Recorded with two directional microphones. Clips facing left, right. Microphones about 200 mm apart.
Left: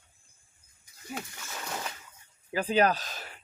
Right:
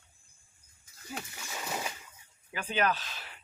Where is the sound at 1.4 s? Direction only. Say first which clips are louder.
Right 1 dB; 10° right (ahead or behind).